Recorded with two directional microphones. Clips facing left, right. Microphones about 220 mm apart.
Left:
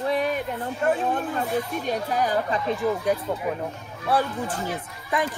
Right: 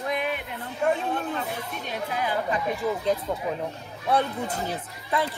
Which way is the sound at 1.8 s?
45° left (ahead or behind).